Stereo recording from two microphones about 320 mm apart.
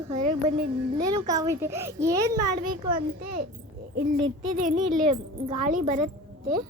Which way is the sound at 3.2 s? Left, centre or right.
Right.